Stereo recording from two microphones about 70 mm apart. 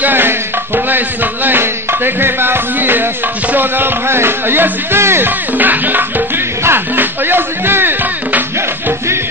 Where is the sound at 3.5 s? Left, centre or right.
Right.